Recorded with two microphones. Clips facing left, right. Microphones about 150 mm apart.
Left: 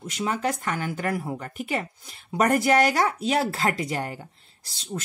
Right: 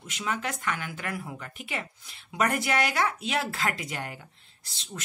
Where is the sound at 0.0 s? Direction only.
35° left (ahead or behind).